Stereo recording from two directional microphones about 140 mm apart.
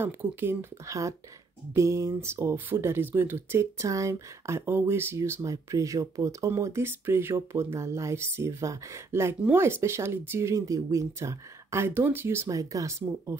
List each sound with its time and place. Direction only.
0.0 s speech: 15° right (ahead or behind)